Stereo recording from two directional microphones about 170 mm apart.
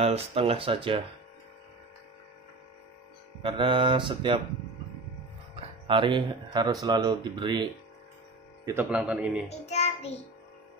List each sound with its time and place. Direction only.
0.0 s speech: 35° right (ahead or behind)
3.4 s speech: 30° right (ahead or behind)
5.9 s speech: 30° right (ahead or behind)
8.6 s speech: 10° right (ahead or behind)
9.5 s child singing: 40° left (ahead or behind)